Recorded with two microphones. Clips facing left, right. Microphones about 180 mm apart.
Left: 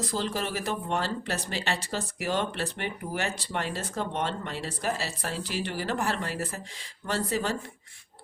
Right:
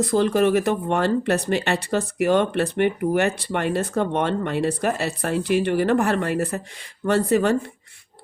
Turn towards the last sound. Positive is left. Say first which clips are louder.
# right 10 dB
turn(degrees=-60)  # may be behind; listen again after turning